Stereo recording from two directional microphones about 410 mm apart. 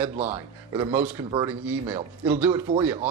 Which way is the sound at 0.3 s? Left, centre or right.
Centre.